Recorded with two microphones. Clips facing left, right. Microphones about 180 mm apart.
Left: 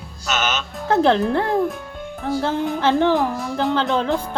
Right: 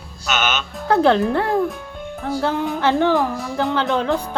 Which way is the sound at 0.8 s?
25° left (ahead or behind).